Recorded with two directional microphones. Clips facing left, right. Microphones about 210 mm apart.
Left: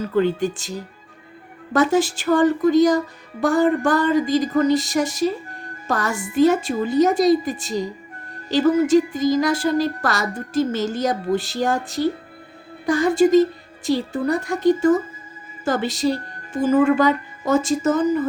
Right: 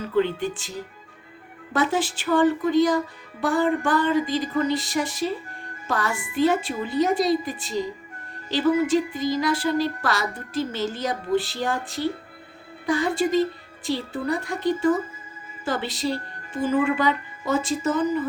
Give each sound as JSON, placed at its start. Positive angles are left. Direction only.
{"t": 0.2, "sound": "speech", "side_deg": 40}
{"t": 1.7, "sound": "speech", "side_deg": 45}